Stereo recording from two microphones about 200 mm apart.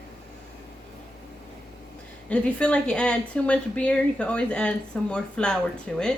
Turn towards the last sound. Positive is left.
turn(degrees=5)  # may be behind; listen again after turning